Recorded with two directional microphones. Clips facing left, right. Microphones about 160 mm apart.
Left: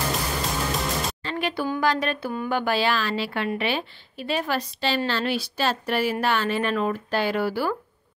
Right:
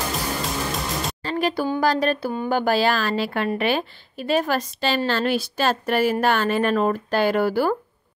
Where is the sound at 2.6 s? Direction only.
40° right (ahead or behind).